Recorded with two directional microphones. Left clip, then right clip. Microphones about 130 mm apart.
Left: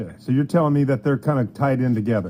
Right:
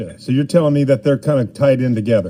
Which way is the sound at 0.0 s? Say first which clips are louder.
Right 4 dB; 20° right (ahead or behind).